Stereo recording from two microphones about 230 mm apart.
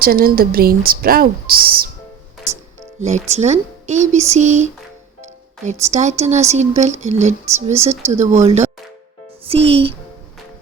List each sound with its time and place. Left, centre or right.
0.0 s speech: right
3.2 s speech: right